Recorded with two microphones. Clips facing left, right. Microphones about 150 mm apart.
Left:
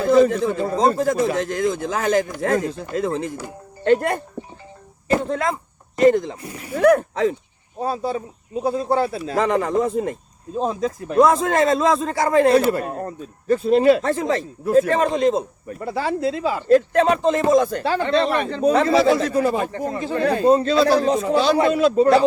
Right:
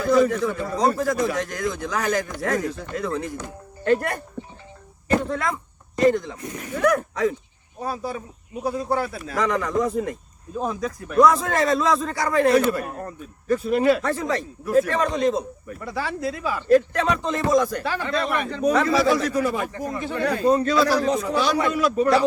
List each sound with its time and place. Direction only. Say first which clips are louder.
0.0 s a man's voice: left 3 dB; 25° left (ahead or behind)